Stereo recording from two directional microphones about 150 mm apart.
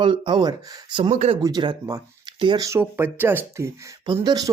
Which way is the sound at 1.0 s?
45° right (ahead or behind).